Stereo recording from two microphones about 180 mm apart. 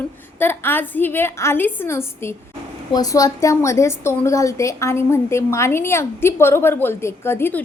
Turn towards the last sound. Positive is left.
turn(degrees=10)  # may be behind; listen again after turning